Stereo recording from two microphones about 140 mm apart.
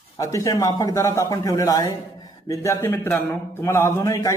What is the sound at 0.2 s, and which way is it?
A man's voice, 25° left (ahead or behind).